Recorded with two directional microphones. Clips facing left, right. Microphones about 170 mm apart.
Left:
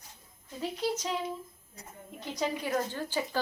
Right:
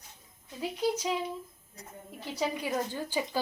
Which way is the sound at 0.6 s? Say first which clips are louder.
Right 2 dB; 10° right (ahead or behind).